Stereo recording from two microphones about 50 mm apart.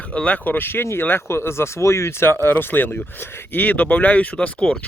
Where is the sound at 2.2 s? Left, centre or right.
Left.